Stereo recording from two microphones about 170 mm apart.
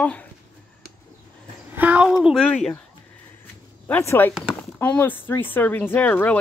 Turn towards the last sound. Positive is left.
turn(degrees=10)  # may be behind; listen again after turning